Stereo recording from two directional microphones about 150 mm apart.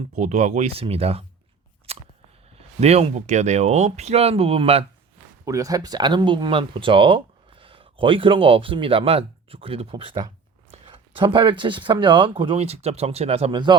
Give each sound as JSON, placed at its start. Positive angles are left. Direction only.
{"t": 0.2, "sound": "speech", "side_deg": -50}
{"t": 1.9, "sound": "a sound", "side_deg": -40}
{"t": 2.6, "sound": "speech", "side_deg": -45}
{"t": 5.5, "sound": "speech", "side_deg": -20}